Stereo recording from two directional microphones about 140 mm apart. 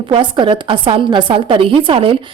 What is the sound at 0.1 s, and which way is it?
A woman's voice, 35° right (ahead or behind).